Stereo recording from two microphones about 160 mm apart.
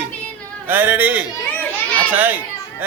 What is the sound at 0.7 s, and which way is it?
A man's voice, 10° right (ahead or behind).